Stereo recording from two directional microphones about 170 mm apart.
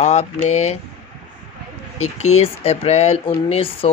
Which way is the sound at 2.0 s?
40° left (ahead or behind).